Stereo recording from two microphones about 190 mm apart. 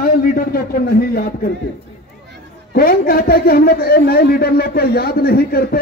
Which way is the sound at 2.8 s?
50° left (ahead or behind).